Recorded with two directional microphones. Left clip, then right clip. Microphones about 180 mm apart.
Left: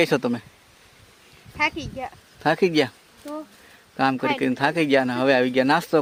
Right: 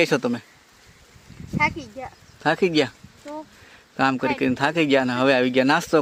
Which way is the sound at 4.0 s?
5° right (ahead or behind).